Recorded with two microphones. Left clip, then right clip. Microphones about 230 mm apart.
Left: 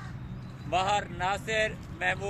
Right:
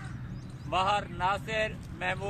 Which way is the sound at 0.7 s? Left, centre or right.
Centre.